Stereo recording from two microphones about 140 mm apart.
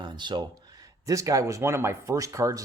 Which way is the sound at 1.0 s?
25° right (ahead or behind).